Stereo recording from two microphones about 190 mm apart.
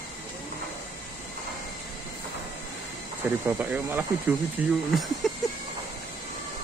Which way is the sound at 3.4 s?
10° right (ahead or behind).